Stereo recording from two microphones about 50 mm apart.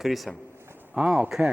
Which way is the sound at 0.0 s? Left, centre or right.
Centre.